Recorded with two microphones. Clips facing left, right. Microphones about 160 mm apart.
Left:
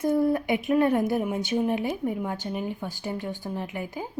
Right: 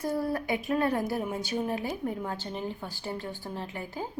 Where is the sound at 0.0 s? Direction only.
20° left (ahead or behind).